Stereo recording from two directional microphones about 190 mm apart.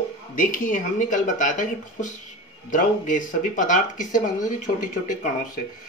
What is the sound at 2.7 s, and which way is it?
Speech, 45° left (ahead or behind).